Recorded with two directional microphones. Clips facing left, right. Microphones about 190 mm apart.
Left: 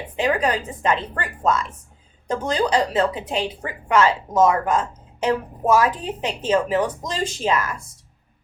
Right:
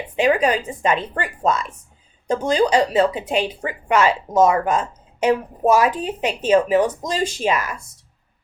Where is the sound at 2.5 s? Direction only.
15° right (ahead or behind).